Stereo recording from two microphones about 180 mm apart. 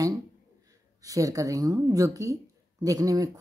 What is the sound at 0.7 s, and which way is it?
A woman's voice, 20° right (ahead or behind).